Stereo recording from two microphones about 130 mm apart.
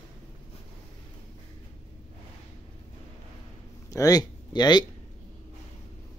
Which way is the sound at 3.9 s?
30° left (ahead or behind).